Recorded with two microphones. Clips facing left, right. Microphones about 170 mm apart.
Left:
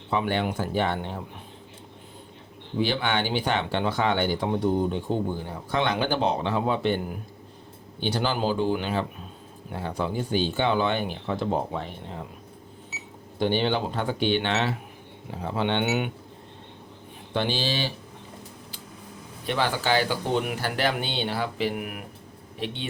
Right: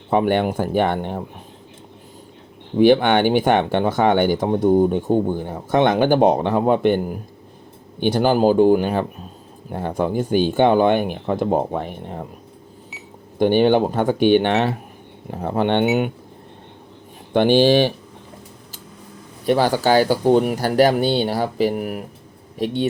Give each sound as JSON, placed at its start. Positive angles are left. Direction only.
{"t": 0.1, "sound": "speech", "side_deg": -50}
{"t": 2.7, "sound": "speech", "side_deg": -55}
{"t": 13.4, "sound": "speech", "side_deg": -50}
{"t": 17.3, "sound": "speech", "side_deg": -55}
{"t": 19.5, "sound": "speech", "side_deg": -40}